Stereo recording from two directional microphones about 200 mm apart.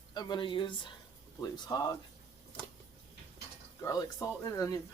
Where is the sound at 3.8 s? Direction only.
15° left (ahead or behind).